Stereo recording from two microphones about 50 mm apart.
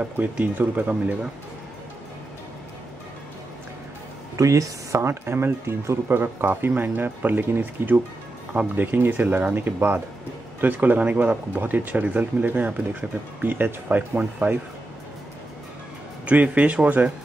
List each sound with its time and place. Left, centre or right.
0.6 s speech: right
4.4 s speech: right
16.3 s speech: right